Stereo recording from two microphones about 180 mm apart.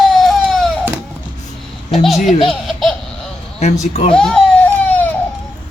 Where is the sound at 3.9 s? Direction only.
35° left (ahead or behind).